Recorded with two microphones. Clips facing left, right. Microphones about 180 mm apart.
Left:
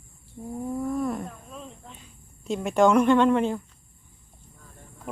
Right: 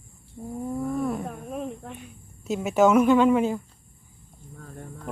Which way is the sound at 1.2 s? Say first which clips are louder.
Right 9 dB; 60° right (ahead or behind).